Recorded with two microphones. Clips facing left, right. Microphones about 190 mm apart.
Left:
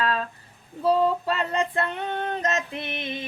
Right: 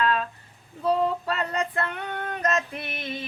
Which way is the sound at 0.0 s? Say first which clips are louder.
Right 1 dB; 35° left (ahead or behind).